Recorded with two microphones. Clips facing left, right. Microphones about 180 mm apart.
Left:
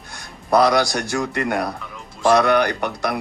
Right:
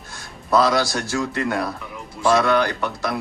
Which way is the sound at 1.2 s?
60° left (ahead or behind).